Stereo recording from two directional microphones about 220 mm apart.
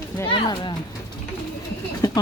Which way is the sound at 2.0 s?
15° left (ahead or behind).